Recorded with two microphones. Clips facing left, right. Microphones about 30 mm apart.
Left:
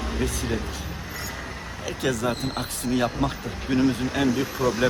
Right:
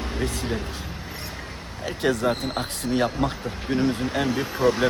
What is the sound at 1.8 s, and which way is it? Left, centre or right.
Speech, right.